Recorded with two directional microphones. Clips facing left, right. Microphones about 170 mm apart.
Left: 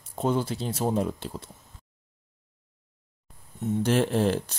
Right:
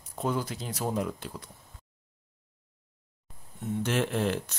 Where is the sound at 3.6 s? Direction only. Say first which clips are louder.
Left 5 dB; 35° left (ahead or behind).